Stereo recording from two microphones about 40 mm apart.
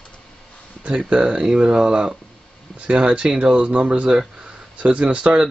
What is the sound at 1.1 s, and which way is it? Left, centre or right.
Speech, right.